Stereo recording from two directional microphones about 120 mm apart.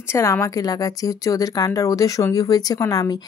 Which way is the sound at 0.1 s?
25° left (ahead or behind).